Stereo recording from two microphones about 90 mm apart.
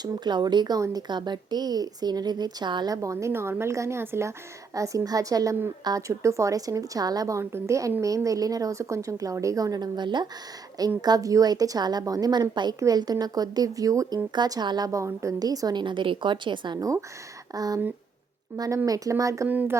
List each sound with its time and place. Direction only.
0.0 s speech: 50° right (ahead or behind)
2.9 s a woman's voice: 35° right (ahead or behind); by 10.2 s 55° right (ahead or behind)
10.8 s speech: 45° right (ahead or behind)
14.3 s speech: 50° right (ahead or behind)
14.8 s speech: 35° right (ahead or behind); by 16.8 s 60° right (ahead or behind)
17.5 s a woman's voice: 45° right (ahead or behind)
19.5 s speech: 20° right (ahead or behind)